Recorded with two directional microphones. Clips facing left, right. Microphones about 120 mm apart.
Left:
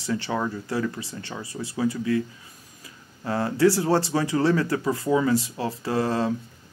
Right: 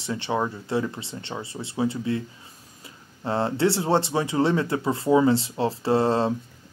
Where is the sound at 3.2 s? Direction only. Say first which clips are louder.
Left 2 dB; 25° right (ahead or behind).